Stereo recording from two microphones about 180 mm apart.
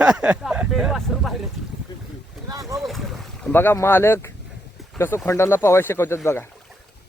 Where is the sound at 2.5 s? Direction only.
20° right (ahead or behind).